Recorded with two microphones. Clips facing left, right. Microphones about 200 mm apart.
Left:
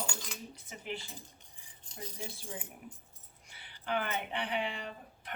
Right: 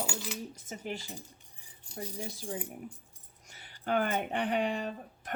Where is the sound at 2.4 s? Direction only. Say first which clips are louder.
Right 7 dB; 40° right (ahead or behind).